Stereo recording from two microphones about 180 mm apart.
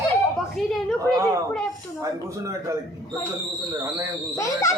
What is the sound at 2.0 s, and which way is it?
Speech, 15° right (ahead or behind).